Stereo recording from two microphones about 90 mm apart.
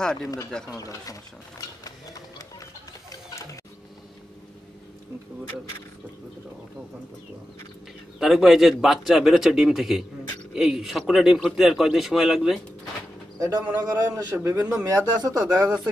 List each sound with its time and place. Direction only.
0.0 s speech: 5° left (ahead or behind)
0.7 s speech: 40° left (ahead or behind)
1.9 s horse: 40° left (ahead or behind)
8.2 s a man's voice: centre (ahead or behind)
13.6 s a man's voice: 15° right (ahead or behind)
13.8 s speech: 35° right (ahead or behind)